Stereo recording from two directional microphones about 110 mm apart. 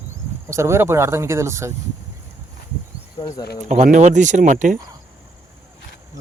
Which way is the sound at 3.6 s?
90° right.